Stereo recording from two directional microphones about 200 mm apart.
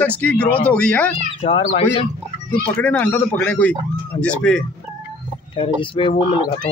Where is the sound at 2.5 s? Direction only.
5° left (ahead or behind).